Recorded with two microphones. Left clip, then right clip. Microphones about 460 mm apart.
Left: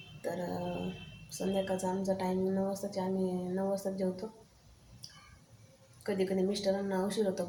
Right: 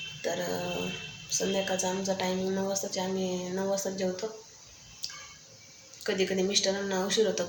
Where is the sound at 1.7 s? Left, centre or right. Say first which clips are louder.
Right 3 dB; left.